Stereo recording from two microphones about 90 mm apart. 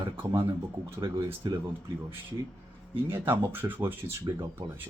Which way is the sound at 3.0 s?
25° right (ahead or behind).